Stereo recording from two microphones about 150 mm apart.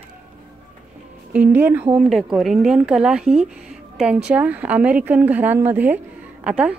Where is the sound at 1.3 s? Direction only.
10° right (ahead or behind).